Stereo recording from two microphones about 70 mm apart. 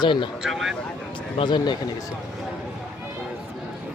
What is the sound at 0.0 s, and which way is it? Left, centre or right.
Speech, left.